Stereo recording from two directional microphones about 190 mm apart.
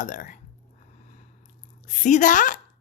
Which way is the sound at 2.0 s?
40° left (ahead or behind).